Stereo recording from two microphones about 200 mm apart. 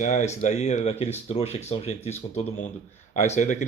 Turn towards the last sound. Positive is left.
turn(degrees=35)  # may be behind; listen again after turning